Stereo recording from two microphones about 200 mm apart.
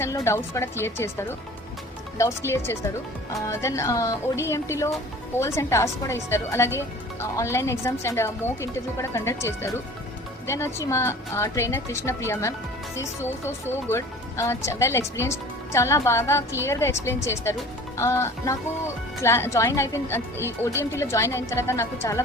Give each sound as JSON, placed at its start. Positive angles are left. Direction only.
{"t": 0.0, "sound": "speech", "side_deg": 15}